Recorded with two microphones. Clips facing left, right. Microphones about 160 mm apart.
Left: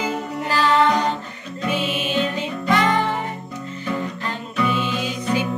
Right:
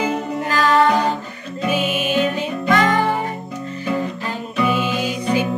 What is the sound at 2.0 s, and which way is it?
Music, 10° right (ahead or behind).